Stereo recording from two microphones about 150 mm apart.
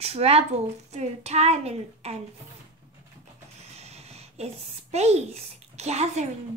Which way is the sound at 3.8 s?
45° right (ahead or behind).